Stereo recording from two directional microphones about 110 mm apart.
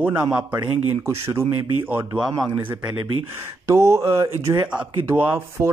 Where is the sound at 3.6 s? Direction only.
25° right (ahead or behind).